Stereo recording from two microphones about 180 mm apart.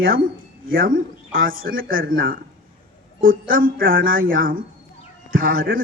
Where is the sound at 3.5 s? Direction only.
55° right (ahead or behind).